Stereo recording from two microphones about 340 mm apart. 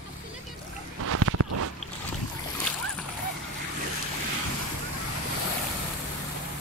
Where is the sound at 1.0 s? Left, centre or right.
Right.